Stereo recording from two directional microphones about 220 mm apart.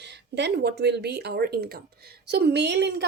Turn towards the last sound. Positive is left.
turn(degrees=-50)  # may be behind; listen again after turning